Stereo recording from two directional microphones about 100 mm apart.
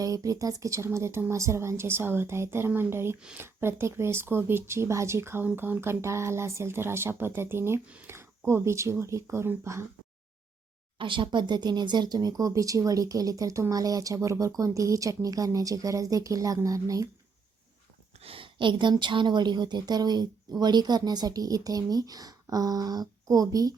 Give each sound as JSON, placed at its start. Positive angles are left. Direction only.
{"t": 0.0, "sound": "speech", "side_deg": -35}
{"t": 10.9, "sound": "speech", "side_deg": -55}
{"t": 18.2, "sound": "a woman's voice", "side_deg": -65}